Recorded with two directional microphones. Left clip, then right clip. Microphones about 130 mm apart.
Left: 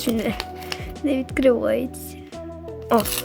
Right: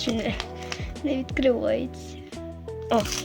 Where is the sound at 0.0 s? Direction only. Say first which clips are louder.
Left 3 dB; 45° left (ahead or behind).